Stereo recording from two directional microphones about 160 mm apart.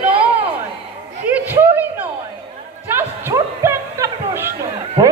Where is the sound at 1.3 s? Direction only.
10° right (ahead or behind).